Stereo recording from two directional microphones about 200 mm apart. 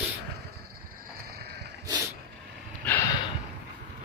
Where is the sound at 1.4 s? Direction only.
55° right (ahead or behind).